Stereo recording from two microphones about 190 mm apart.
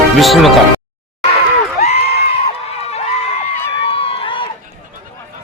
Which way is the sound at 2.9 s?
35° left (ahead or behind).